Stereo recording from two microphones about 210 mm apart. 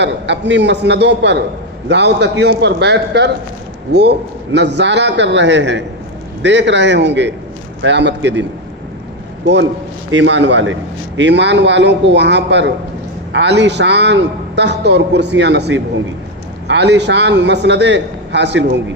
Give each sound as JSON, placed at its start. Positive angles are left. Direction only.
{"t": 0.0, "sound": "a man's voice", "side_deg": -55}
{"t": 4.5, "sound": "a man's voice", "side_deg": -55}
{"t": 10.1, "sound": "a man's voice", "side_deg": -60}